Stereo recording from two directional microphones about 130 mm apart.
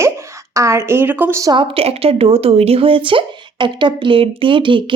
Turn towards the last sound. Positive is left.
turn(degrees=-40)  # may be behind; listen again after turning